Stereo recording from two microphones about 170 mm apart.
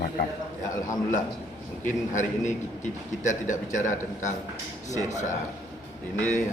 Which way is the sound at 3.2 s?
45° left (ahead or behind).